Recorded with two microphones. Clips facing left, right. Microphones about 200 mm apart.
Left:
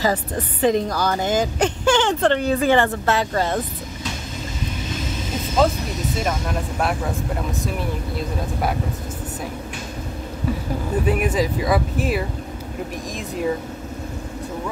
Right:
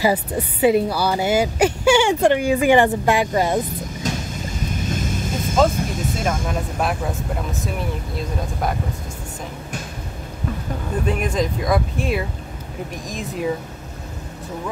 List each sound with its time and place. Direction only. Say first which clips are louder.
0.0 s a woman's voice: right 2 dB; 10° right (ahead or behind)
4.8 s vehicle: right 3 dB; 50° right (ahead or behind)
5.8 s speech: right 1 dB; 50° right (ahead or behind)
6.8 s speech: even; centre (ahead or behind)
8.2 s speech: even; 5° left (ahead or behind)
11.1 s speech: left 1 dB; 5° left (ahead or behind)